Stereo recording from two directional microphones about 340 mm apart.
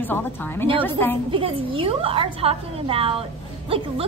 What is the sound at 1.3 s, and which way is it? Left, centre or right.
A woman's voice, centre.